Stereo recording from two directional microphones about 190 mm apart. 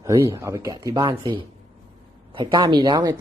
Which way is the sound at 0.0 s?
15° right (ahead or behind).